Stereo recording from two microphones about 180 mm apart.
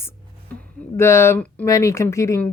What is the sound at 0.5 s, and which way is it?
Speech, 10° left (ahead or behind).